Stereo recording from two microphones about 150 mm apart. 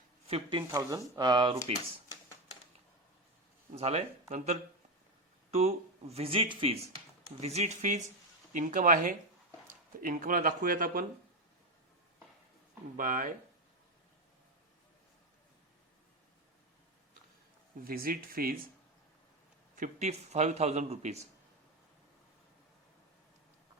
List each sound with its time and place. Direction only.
0.3 s speech: 40° right (ahead or behind)
0.7 s speech: 25° right (ahead or behind)
3.8 s a man's voice: 45° right (ahead or behind); by 11.0 s 70° right (ahead or behind)
13.0 s speech: 65° right (ahead or behind)
17.8 s speech: 80° right
19.7 s a man's voice: 55° right (ahead or behind)